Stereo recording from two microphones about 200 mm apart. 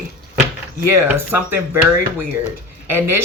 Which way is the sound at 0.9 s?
10° right (ahead or behind).